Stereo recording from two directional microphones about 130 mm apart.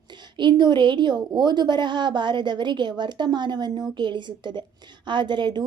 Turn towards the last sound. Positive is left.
turn(degrees=-35)  # may be behind; listen again after turning